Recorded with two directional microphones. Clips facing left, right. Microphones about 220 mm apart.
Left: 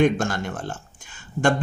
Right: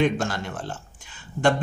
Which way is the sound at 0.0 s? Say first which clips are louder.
Left 3 dB; 50° left (ahead or behind).